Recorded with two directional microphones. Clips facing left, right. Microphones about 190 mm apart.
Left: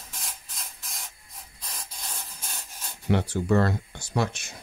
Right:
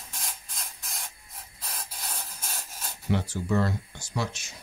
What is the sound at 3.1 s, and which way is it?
Speech, 65° left (ahead or behind).